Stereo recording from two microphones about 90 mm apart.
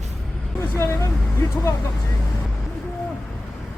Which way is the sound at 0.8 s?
30° left (ahead or behind).